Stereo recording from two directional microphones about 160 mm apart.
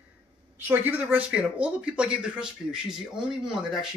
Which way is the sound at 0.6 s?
15° right (ahead or behind).